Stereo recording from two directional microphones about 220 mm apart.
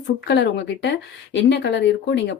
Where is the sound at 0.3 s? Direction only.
50° left (ahead or behind).